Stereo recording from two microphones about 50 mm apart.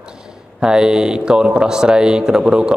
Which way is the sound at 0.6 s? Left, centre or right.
Centre.